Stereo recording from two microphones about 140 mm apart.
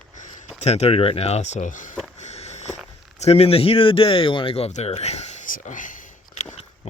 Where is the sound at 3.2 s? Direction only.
45° left (ahead or behind); by 6.4 s 70° left (ahead or behind).